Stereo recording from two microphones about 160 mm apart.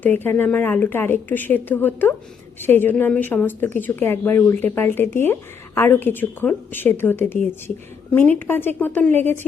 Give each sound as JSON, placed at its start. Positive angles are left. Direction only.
{"t": 0.0, "sound": "a woman's voice", "side_deg": 10}